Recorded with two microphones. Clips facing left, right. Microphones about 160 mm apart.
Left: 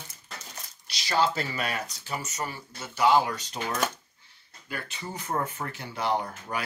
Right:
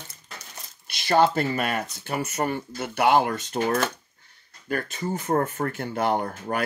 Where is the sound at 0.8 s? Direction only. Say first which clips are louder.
Right 6 dB; 55° right (ahead or behind).